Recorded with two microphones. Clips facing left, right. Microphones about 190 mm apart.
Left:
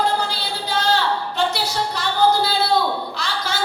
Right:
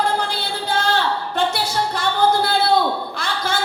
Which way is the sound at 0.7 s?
55° right (ahead or behind).